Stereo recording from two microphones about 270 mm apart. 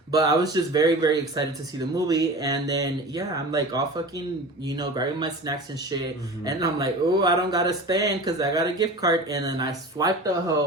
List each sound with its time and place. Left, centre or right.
0.1 s speech: centre